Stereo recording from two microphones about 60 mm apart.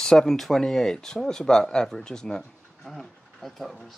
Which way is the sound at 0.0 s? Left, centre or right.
Centre.